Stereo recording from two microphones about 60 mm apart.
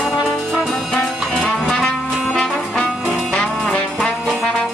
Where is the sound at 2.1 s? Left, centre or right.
Centre.